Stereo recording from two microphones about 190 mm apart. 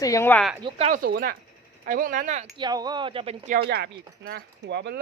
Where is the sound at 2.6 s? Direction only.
20° right (ahead or behind).